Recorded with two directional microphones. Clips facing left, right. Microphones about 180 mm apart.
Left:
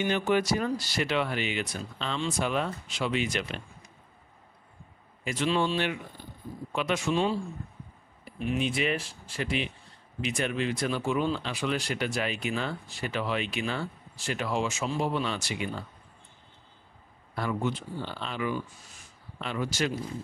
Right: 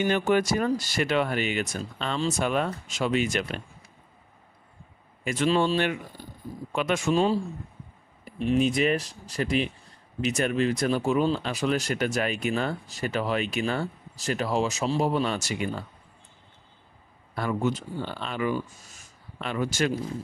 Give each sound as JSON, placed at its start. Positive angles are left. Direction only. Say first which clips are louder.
{"t": 0.0, "sound": "speech", "louder": "right 3 dB", "side_deg": -50}
{"t": 5.2, "sound": "speech", "louder": "right 4 dB", "side_deg": -50}
{"t": 8.5, "sound": "speech", "louder": "right 6 dB", "side_deg": -40}
{"t": 17.4, "sound": "speech", "louder": "right 3 dB", "side_deg": -45}